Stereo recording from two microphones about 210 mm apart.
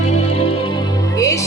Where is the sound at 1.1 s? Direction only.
15° left (ahead or behind).